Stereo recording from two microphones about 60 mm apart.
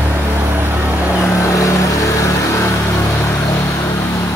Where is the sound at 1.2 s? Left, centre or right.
Left.